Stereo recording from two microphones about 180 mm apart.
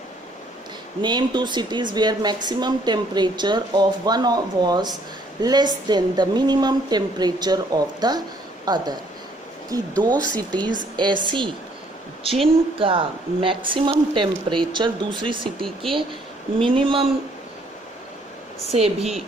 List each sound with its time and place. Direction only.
1.0 s speech: 25° right (ahead or behind)
10.0 s speech: 25° right (ahead or behind)
12.8 s speech: 30° right (ahead or behind)
15.6 s speech: centre (ahead or behind)
16.6 s speech: 30° right (ahead or behind)
18.7 s a woman's voice: 35° right (ahead or behind)